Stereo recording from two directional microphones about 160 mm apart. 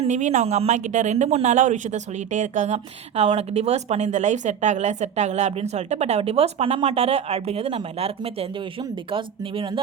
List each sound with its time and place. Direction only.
0.0 s speech: 45° right (ahead or behind)